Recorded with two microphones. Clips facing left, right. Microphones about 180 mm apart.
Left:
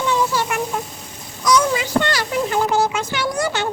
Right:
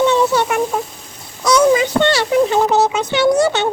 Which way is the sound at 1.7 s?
25° right (ahead or behind).